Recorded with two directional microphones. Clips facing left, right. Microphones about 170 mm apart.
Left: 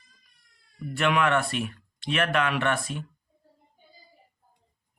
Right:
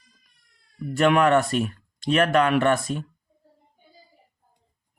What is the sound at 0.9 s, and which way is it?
Speech, 40° right (ahead or behind).